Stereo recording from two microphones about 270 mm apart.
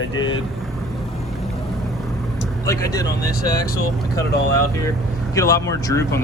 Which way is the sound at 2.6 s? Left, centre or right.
Centre.